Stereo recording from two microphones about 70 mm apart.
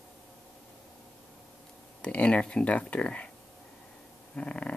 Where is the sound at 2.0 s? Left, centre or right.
Centre.